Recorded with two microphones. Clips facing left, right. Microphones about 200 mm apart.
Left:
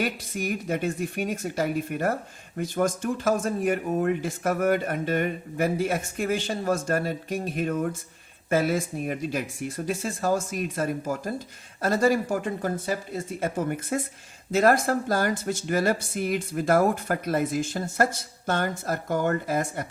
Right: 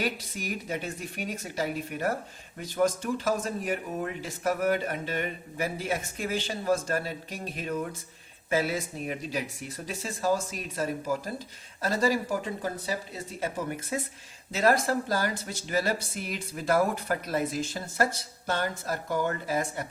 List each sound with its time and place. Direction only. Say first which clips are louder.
0.0 s speech: left 4 dB; 50° left (ahead or behind)